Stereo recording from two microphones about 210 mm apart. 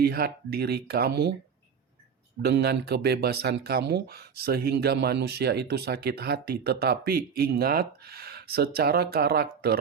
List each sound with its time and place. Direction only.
0.0 s speech: 45° right (ahead or behind)
2.4 s speech: 50° right (ahead or behind)